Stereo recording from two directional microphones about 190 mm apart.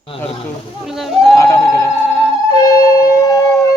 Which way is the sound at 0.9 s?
Centre (ahead or behind).